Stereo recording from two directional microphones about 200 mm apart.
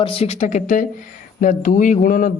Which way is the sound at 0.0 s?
30° left (ahead or behind).